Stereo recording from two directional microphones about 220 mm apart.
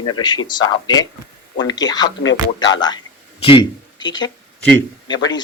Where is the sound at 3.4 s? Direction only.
20° left (ahead or behind).